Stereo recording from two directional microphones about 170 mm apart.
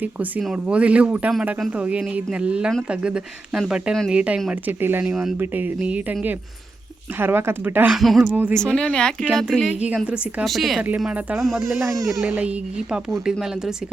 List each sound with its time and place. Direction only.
0.0 s speech: 10° right (ahead or behind)
8.5 s speech: 5° left (ahead or behind)
11.9 s speech: 20° right (ahead or behind)
12.2 s speech: 5° right (ahead or behind)